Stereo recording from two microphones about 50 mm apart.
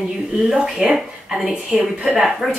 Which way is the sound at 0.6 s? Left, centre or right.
Centre.